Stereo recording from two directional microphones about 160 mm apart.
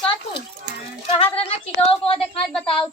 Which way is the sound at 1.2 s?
35° left (ahead or behind).